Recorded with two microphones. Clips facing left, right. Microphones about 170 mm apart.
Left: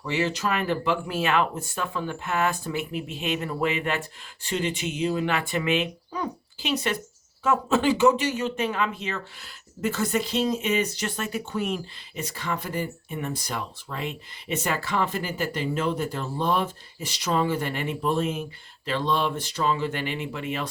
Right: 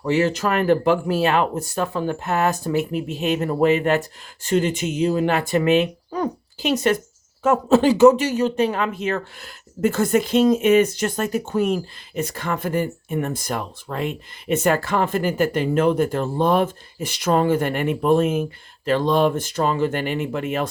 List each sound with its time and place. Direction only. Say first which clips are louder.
0.0 s speech: right 7 dB; 45° right (ahead or behind)